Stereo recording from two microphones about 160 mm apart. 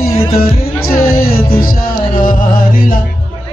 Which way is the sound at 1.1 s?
70° left (ahead or behind).